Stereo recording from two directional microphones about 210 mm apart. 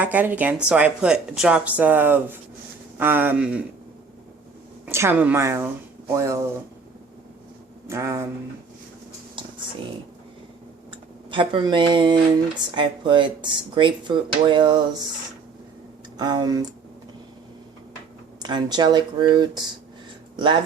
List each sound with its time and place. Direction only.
0.0 s speech: 10° right (ahead or behind)
4.9 s speech: 10° right (ahead or behind)
7.9 s speech: 15° right (ahead or behind)
10.9 s speech: 25° right (ahead or behind)
16.1 s speech: 20° right (ahead or behind)
18.4 s speech: 20° right (ahead or behind)